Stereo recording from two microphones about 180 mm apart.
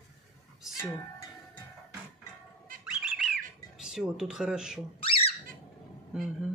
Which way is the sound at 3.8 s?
5° right (ahead or behind).